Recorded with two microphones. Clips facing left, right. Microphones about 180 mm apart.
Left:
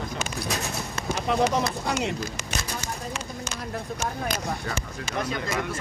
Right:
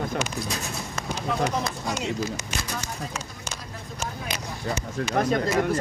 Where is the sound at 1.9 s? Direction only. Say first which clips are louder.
Left 2 dB; 65° left (ahead or behind).